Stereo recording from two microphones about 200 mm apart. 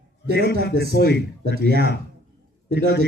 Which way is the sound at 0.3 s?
55° left (ahead or behind).